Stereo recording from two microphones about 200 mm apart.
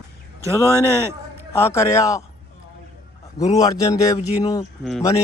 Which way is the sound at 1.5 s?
10° left (ahead or behind).